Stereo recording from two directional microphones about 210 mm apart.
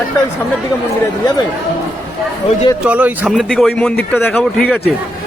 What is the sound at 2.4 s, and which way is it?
Speech, 25° left (ahead or behind).